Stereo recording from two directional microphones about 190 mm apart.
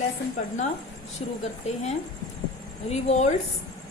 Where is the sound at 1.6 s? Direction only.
35° left (ahead or behind).